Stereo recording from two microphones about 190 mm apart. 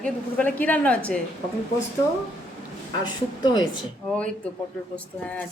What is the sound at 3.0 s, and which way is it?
Speech, 20° left (ahead or behind).